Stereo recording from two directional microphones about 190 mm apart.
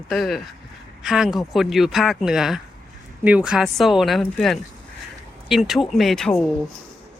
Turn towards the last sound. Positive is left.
turn(degrees=5)  # may be behind; listen again after turning